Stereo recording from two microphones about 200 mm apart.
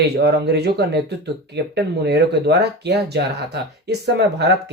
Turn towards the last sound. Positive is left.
turn(degrees=-55)  # may be behind; listen again after turning